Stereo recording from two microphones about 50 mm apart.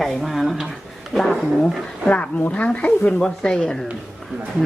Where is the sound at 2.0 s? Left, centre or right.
Left.